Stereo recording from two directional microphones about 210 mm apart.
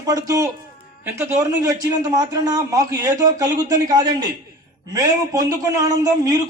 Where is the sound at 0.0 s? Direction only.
15° right (ahead or behind).